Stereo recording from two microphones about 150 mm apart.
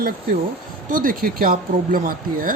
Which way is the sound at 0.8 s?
65° right (ahead or behind).